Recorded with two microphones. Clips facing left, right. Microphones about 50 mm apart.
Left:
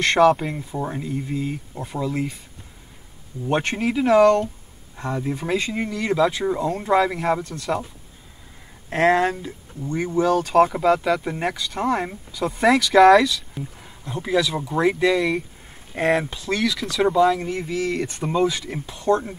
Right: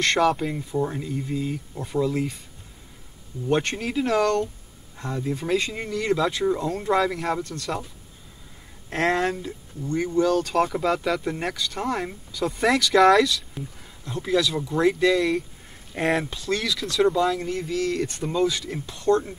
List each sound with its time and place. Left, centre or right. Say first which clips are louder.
0.0 s speech: left 5 dB; centre
3.4 s speech: left 2 dB; centre
8.9 s speech: left 5 dB; centre
16.0 s speech: left 3 dB; centre
16.3 s speech: left 3 dB; centre